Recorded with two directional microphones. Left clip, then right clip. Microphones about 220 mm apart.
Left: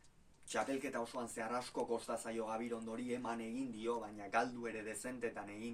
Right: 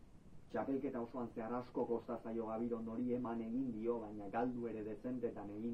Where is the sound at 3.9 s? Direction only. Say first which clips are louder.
Left 5 dB; 25° left (ahead or behind).